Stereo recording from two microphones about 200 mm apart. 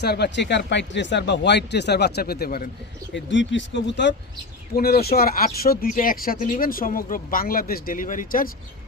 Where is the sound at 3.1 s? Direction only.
65° left (ahead or behind).